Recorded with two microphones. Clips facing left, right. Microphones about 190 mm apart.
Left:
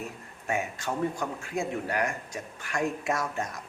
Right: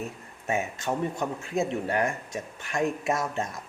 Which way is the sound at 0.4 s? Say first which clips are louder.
Right 2 dB; 25° right (ahead or behind).